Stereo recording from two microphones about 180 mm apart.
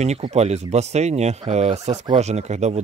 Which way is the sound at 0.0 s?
40° right (ahead or behind).